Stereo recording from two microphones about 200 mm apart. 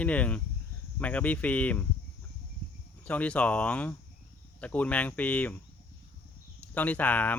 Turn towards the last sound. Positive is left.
turn(degrees=10)  # may be behind; listen again after turning